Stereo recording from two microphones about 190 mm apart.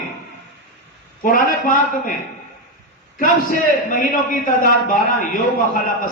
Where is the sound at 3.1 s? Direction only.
45° left (ahead or behind).